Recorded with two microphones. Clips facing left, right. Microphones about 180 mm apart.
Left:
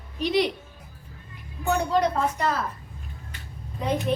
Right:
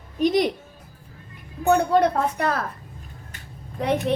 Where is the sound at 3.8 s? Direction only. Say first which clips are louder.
Right 3 dB; 75° right (ahead or behind).